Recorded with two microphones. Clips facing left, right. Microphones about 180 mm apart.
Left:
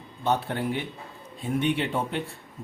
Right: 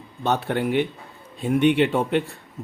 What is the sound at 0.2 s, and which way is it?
A man's voice, 75° right (ahead or behind).